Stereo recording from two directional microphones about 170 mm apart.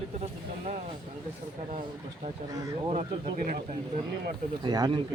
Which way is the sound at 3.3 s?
55° right (ahead or behind).